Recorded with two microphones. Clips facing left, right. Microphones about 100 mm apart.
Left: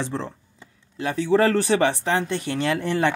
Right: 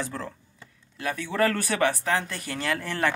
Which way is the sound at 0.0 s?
25° left (ahead or behind).